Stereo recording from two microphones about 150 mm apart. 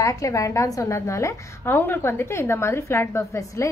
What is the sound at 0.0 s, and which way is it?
A woman's voice, 20° left (ahead or behind).